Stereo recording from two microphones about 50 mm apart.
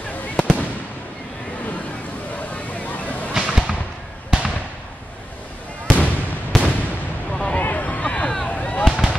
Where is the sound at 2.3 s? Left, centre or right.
Left.